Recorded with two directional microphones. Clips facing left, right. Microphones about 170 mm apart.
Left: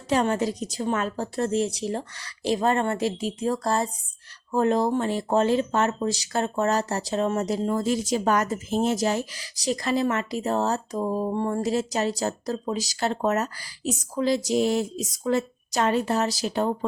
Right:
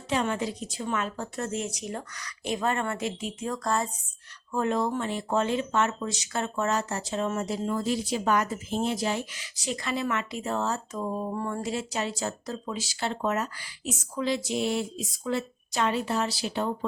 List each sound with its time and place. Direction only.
0.1 s speech: 40° left (ahead or behind)